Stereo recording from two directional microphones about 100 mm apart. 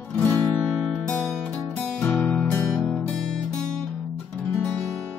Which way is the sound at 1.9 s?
15° left (ahead or behind).